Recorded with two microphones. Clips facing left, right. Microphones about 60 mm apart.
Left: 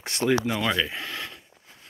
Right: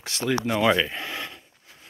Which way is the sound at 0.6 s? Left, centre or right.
Centre.